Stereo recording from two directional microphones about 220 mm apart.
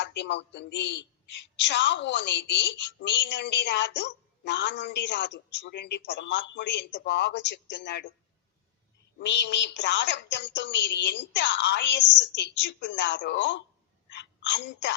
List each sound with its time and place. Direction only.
0.0 s a woman's voice: 50° left (ahead or behind)
9.1 s a woman's voice: 50° left (ahead or behind)
14.1 s a sound: 50° left (ahead or behind)